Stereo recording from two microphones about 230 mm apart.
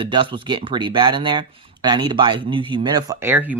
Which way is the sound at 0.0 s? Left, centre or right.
Right.